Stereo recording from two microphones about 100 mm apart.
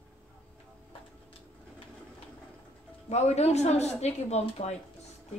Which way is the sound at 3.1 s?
90° left.